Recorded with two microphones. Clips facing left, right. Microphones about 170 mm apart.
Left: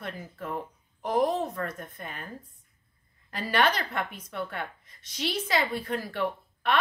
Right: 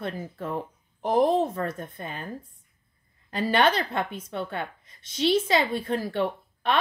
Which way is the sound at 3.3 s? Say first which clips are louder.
Right 4 dB; 25° right (ahead or behind).